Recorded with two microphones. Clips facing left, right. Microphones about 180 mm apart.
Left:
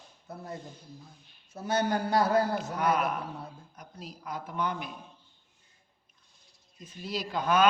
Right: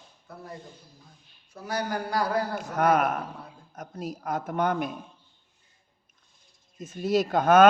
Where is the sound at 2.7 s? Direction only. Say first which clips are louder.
Right 7 dB; 50° right (ahead or behind).